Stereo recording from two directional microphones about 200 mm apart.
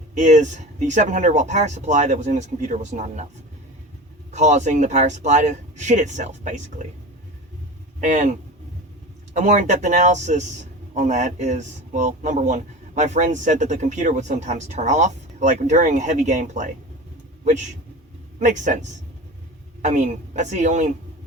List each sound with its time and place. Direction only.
0.1 s speech: 35° right (ahead or behind)
4.3 s speech: 35° right (ahead or behind)
8.0 s a man's voice: 40° right (ahead or behind)